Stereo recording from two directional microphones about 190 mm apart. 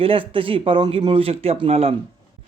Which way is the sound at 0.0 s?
30° right (ahead or behind).